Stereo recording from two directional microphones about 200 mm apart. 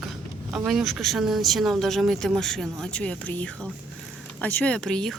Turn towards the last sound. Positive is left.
turn(degrees=5)  # may be behind; listen again after turning